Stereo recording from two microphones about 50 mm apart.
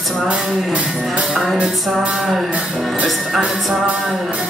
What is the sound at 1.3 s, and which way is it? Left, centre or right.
Music, centre.